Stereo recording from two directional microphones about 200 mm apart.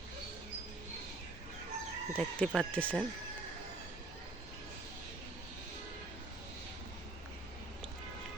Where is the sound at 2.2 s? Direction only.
Centre (ahead or behind).